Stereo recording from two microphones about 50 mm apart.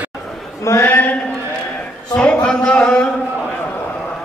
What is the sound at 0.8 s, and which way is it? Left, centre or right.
Speech, left.